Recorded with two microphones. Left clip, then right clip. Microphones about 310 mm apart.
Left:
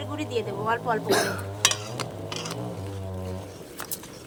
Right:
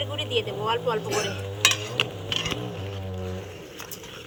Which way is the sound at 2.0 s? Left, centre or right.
Centre.